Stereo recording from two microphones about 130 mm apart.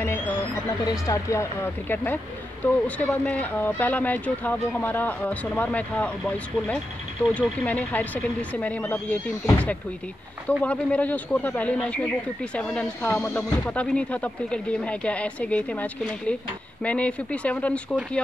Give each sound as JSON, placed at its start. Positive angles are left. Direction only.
{"t": 0.7, "sound": "speech", "side_deg": 25}
{"t": 10.5, "sound": "speech", "side_deg": 10}